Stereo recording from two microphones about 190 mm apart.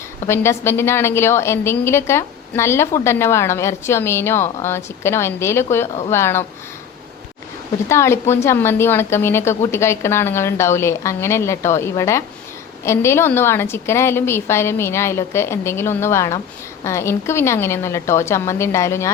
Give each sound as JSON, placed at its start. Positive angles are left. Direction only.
{"t": 0.3, "sound": "a woman's voice", "side_deg": 15}
{"t": 7.9, "sound": "a woman's voice", "side_deg": 15}